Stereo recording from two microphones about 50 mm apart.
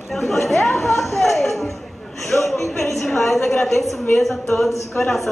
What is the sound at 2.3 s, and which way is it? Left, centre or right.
Speech, left.